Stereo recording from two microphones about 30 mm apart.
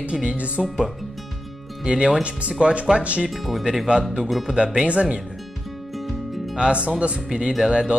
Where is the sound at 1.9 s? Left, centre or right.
Right.